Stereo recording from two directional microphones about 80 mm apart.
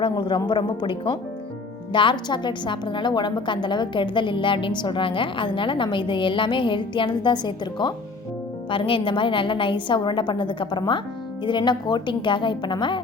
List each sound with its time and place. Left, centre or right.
0.0 s a woman's voice: left
8.7 s a woman's voice: left
11.4 s a woman's voice: left